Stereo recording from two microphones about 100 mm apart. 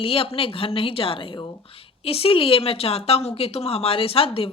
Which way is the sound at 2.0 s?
75° left (ahead or behind).